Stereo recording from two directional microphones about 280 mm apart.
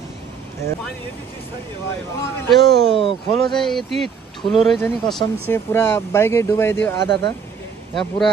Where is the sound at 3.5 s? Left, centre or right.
Centre.